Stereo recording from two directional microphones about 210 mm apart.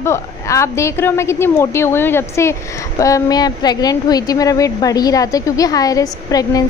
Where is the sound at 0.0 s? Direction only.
15° left (ahead or behind).